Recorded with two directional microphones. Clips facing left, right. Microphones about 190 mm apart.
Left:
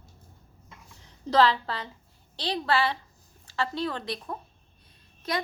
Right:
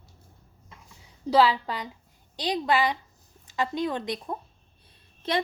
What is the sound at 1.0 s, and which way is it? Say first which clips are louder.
A woman's voice: right 1 dB; 10° right (ahead or behind).